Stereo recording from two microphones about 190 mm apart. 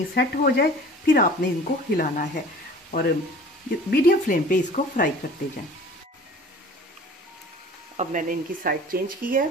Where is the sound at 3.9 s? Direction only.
45° left (ahead or behind).